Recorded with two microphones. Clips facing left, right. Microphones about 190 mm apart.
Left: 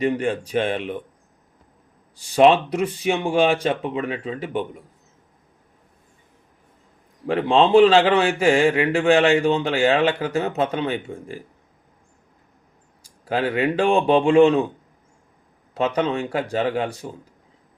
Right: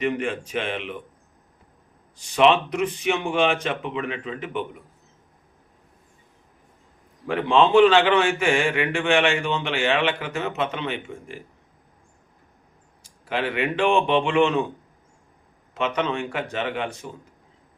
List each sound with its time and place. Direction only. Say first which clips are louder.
0.0 s a man's voice: left 3 dB; 35° left (ahead or behind)
2.1 s a man's voice: left 3 dB; 35° left (ahead or behind)
7.3 s a man's voice: left 2 dB; 35° left (ahead or behind)
13.0 s a man's voice: left 4 dB; 40° left (ahead or behind)
15.7 s a man's voice: left 3 dB; 35° left (ahead or behind)